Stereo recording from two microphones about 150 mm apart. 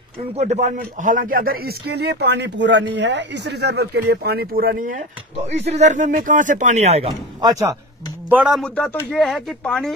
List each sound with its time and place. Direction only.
0.4 s speech: 50° right (ahead or behind); by 2.3 s 90° right
3.4 s speech: 90° right; by 5.0 s 65° right (ahead or behind)
5.5 s speech: 50° right (ahead or behind)
7.4 s speech: 20° right (ahead or behind)
8.3 s speech: 5° right (ahead or behind)
8.6 s speech: 5° left (ahead or behind)